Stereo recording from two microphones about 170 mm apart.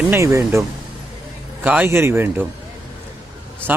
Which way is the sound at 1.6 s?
10° right (ahead or behind).